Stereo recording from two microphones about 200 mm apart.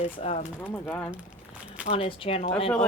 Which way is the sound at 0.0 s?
35° left (ahead or behind).